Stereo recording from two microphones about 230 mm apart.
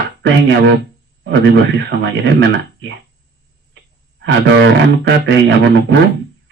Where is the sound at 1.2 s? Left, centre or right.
Right.